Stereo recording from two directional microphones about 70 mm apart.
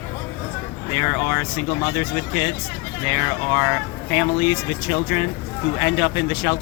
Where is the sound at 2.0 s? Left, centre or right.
Right.